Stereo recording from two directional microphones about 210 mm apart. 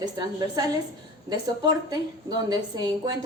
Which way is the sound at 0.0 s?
20° right (ahead or behind).